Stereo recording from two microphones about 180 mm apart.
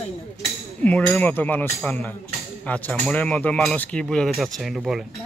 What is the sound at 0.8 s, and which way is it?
Speech, 10° left (ahead or behind).